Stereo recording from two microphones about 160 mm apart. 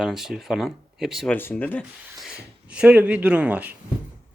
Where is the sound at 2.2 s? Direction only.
5° right (ahead or behind).